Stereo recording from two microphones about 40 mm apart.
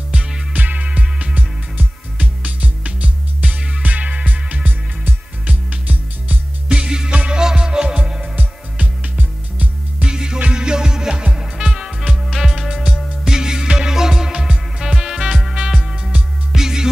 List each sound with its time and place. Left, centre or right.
0.5 s music: right
6.7 s music: centre
8.7 s music: right
10.0 s music: centre